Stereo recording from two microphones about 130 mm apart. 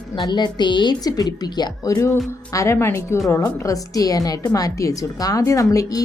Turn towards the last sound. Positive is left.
turn(degrees=25)  # may be behind; listen again after turning